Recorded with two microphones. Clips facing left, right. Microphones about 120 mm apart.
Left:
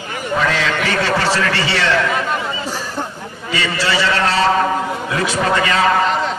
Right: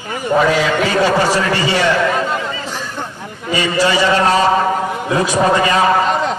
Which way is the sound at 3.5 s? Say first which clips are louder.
Right 4 dB; 15° right (ahead or behind).